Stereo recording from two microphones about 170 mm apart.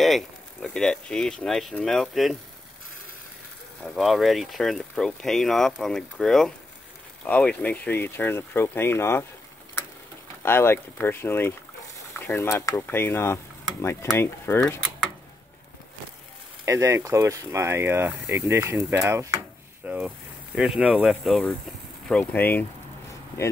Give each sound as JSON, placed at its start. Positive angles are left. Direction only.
{"t": 0.0, "sound": "speech", "side_deg": 0}
{"t": 3.8, "sound": "speech", "side_deg": 0}
{"t": 10.4, "sound": "speech", "side_deg": 15}
{"t": 16.6, "sound": "speech", "side_deg": -15}